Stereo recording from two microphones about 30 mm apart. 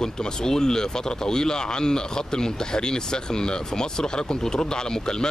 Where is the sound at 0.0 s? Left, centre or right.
Left.